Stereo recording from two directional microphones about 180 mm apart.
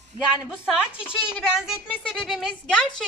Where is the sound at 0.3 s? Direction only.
5° right (ahead or behind).